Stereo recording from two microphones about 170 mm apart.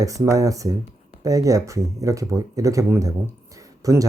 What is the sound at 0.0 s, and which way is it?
Speech, 20° right (ahead or behind).